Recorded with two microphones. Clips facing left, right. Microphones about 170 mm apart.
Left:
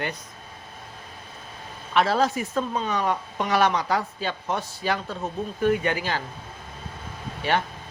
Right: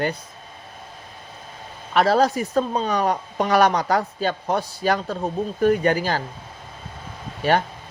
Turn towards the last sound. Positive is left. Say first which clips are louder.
# right 5 dB
turn(degrees=-40)  # may be behind; listen again after turning